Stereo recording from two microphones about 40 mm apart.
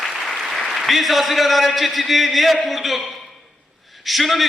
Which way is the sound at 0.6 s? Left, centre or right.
Centre.